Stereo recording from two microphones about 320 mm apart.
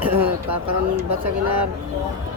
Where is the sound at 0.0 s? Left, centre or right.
Centre.